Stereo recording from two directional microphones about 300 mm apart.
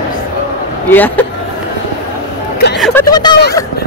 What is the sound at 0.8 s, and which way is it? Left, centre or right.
Speech, centre.